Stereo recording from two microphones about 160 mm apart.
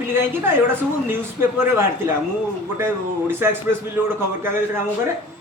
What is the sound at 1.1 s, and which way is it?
Speech, 15° right (ahead or behind).